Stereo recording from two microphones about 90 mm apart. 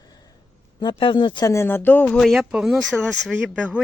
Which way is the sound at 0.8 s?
65° left (ahead or behind).